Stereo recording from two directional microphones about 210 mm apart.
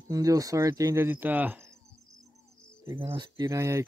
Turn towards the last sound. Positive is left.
turn(degrees=-15)  # may be behind; listen again after turning